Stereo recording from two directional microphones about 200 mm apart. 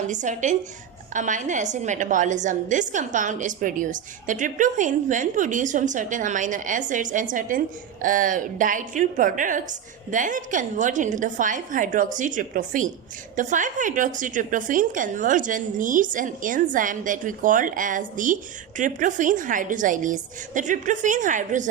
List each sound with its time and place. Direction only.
0.1 s a woman's voice: 40° right (ahead or behind)